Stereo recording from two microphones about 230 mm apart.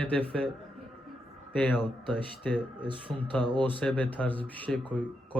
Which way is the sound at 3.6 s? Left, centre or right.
Centre.